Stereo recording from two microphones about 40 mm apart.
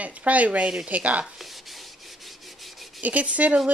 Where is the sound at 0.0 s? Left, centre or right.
Right.